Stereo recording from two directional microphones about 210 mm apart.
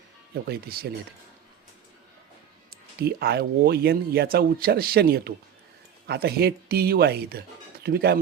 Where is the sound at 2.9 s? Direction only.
45° right (ahead or behind).